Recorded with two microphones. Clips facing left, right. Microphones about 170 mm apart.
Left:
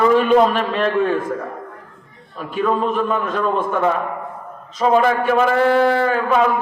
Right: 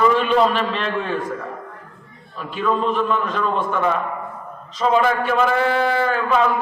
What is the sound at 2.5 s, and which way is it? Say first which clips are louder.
A man's voice: left 2 dB; 50° left (ahead or behind).